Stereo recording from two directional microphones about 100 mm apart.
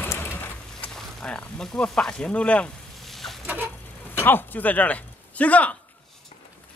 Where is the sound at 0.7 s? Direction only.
10° left (ahead or behind).